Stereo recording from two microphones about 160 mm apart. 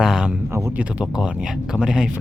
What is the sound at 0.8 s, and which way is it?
Speech, 5° right (ahead or behind).